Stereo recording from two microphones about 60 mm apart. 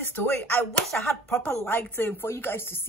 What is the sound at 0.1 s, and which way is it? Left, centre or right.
Speech, left.